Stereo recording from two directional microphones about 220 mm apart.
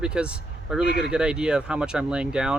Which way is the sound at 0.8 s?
50° left (ahead or behind).